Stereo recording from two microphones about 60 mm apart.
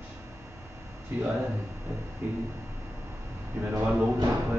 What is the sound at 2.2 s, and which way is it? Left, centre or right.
Speech, right.